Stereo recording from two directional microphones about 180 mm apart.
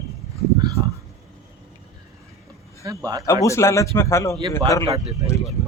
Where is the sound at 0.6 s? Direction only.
20° right (ahead or behind).